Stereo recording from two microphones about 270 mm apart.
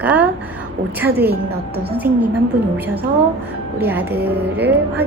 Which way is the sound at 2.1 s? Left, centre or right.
Right.